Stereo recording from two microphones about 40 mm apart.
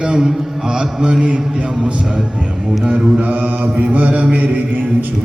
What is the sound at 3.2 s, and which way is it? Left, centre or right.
Mantra, right.